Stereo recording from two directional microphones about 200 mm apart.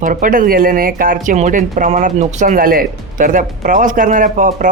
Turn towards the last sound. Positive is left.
turn(degrees=-40)  # may be behind; listen again after turning